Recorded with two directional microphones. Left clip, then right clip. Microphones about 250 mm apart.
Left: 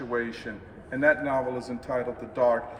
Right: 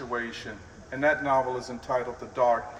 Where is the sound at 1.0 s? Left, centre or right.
Centre.